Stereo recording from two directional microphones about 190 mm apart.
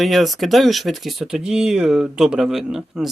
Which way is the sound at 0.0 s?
Centre (ahead or behind).